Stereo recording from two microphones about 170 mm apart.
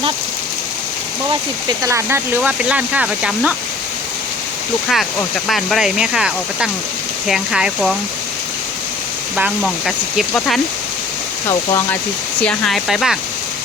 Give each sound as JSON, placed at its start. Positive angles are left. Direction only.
{"t": 1.8, "sound": "speech", "side_deg": -15}
{"t": 5.5, "sound": "speech", "side_deg": 0}
{"t": 9.3, "sound": "speech", "side_deg": -5}
{"t": 11.4, "sound": "speech", "side_deg": 15}
{"t": 12.5, "sound": "speech", "side_deg": 0}